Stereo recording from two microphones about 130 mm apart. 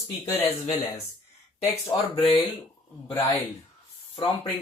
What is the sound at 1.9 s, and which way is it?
Speech, 45° left (ahead or behind).